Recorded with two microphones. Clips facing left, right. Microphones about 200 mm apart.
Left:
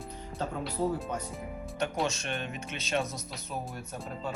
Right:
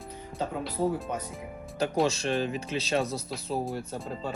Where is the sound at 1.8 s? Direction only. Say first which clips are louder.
Right 6 dB; 30° right (ahead or behind).